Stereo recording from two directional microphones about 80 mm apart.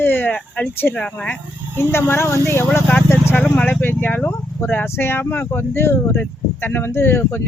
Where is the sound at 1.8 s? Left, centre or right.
Left.